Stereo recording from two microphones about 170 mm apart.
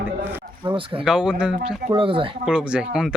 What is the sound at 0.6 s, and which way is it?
Speech, 30° right (ahead or behind).